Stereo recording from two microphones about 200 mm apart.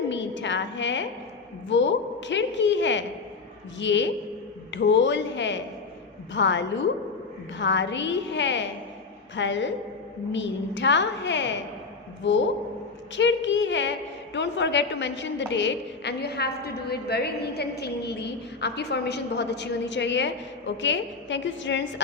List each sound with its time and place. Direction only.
0.1 s a woman's voice: 65° left (ahead or behind)
13.1 s a woman's voice: 65° left (ahead or behind)